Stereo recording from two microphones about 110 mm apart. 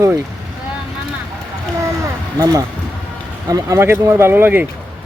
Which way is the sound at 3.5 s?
30° right (ahead or behind).